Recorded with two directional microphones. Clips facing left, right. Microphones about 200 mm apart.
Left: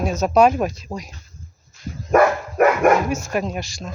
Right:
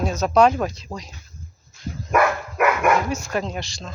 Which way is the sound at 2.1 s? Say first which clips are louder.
Left 5 dB; 40° left (ahead or behind).